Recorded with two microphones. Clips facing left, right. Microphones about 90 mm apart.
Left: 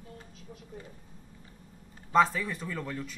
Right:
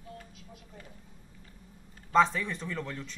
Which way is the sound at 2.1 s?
5° left (ahead or behind).